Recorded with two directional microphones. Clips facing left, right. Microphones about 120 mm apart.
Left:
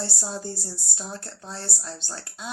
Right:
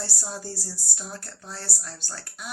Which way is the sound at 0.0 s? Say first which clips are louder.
Left 3 dB; 25° left (ahead or behind).